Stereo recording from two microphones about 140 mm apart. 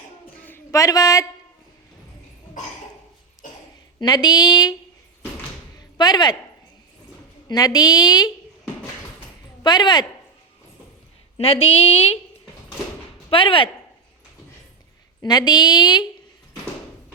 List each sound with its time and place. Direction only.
0.4 s a sound: 20° left (ahead or behind)
4.0 s a woman's voice: 30° left (ahead or behind)
6.0 s speech: 30° left (ahead or behind)
7.4 s a woman's voice: 30° left (ahead or behind)
9.6 s speech: 30° left (ahead or behind)
11.3 s a woman's voice: 40° left (ahead or behind)
13.3 s speech: 40° left (ahead or behind)
15.2 s a woman's voice: 30° left (ahead or behind)